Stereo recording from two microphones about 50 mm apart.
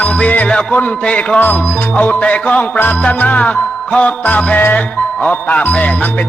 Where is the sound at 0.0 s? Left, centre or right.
Left.